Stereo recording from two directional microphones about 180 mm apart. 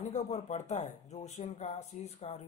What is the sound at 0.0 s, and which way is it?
Speech, 40° left (ahead or behind).